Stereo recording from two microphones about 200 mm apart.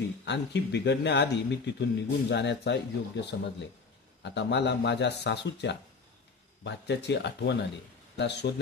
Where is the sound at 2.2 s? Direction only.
60° left (ahead or behind).